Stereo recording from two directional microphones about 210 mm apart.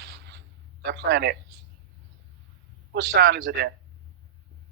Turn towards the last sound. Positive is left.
turn(degrees=-55)  # may be behind; listen again after turning